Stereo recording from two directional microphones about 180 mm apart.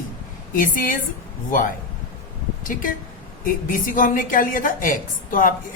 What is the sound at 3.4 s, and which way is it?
A woman's voice, 50° left (ahead or behind).